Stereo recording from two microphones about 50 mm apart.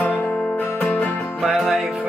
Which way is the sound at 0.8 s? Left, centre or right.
Left.